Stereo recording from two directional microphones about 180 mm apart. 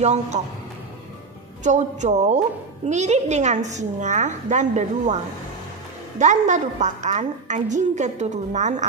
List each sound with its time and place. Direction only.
0.0 s a woman's voice: 40° right (ahead or behind)
1.6 s a woman's voice: 40° right (ahead or behind)